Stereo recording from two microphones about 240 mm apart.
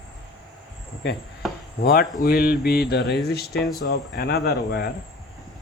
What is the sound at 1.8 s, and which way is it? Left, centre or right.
A man's voice, left.